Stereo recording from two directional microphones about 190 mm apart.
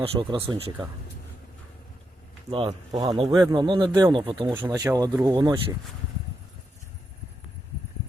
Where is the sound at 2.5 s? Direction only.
30° right (ahead or behind).